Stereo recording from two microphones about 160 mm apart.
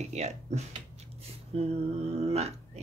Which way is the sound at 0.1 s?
45° right (ahead or behind).